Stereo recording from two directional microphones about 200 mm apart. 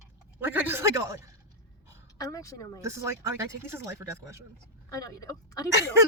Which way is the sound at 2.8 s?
15° right (ahead or behind).